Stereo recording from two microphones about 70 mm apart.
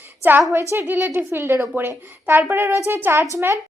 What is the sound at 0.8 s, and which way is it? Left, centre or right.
Speech, right.